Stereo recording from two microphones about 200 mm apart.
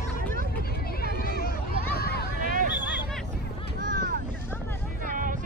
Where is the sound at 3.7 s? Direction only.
40° right (ahead or behind).